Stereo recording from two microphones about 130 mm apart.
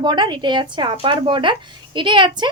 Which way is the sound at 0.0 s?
35° right (ahead or behind).